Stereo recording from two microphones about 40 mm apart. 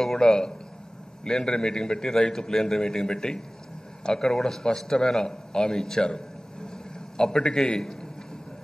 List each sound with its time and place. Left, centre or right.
0.2 s a man's voice: centre